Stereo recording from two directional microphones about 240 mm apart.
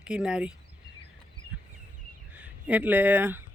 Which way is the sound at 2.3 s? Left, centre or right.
Centre.